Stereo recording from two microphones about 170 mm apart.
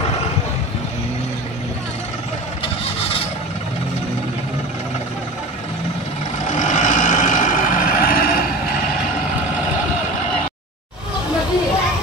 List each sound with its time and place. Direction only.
6.5 s vehicle: 45° left (ahead or behind)